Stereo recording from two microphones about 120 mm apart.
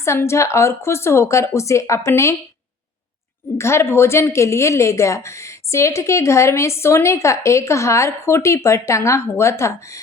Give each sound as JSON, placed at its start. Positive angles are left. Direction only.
{"t": 0.0, "sound": "a woman's voice", "side_deg": 25}
{"t": 3.6, "sound": "a woman's voice", "side_deg": 20}